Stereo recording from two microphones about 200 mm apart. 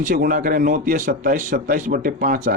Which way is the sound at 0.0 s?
45° right (ahead or behind).